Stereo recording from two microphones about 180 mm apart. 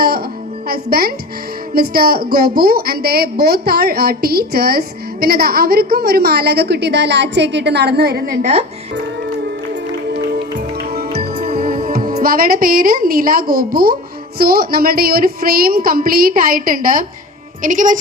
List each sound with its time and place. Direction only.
0.7 s a woman's voice: 55° right (ahead or behind)
10.1 s music: 65° right (ahead or behind)
14.3 s a woman's voice: 55° right (ahead or behind)